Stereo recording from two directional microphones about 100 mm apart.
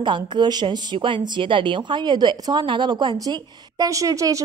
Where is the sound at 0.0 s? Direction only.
50° right (ahead or behind).